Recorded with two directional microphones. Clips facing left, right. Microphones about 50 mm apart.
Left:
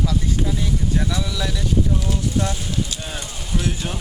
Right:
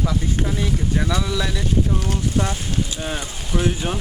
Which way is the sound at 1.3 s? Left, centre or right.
Right.